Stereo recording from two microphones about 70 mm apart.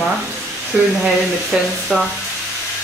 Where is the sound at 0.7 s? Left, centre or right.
Centre.